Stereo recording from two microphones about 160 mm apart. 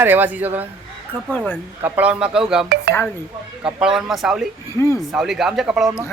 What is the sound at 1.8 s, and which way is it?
Speech, 10° right (ahead or behind).